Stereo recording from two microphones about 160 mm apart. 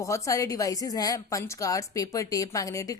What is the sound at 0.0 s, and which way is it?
A woman's voice, 20° left (ahead or behind).